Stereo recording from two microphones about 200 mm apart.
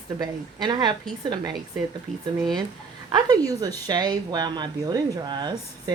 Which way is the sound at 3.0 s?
20° right (ahead or behind).